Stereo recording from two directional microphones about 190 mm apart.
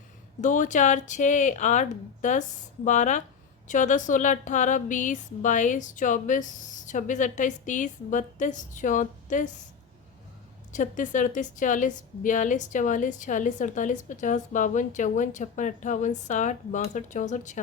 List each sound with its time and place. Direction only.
0.4 s a woman's voice: 40° left (ahead or behind)
10.7 s a woman's voice: 40° left (ahead or behind)